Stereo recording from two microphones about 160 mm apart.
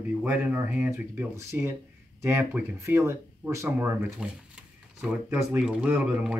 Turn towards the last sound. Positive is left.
turn(degrees=-10)  # may be behind; listen again after turning